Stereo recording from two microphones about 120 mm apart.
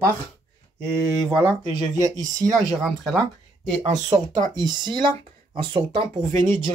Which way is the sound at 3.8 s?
30° right (ahead or behind).